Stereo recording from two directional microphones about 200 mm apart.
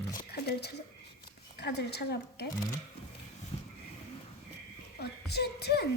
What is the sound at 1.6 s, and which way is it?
Speech, 55° left (ahead or behind).